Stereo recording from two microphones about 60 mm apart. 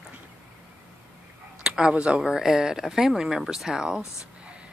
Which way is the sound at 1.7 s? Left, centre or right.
Centre.